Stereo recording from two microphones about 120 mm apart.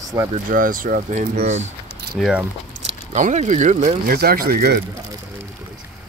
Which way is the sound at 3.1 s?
75° right (ahead or behind).